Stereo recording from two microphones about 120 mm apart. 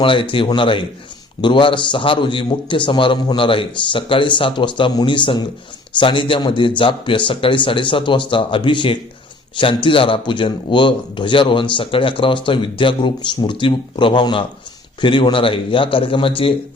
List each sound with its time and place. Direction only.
0.0 s a man's voice: 45° left (ahead or behind)